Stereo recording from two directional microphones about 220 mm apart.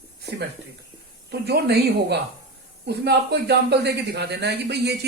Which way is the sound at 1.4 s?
50° right (ahead or behind).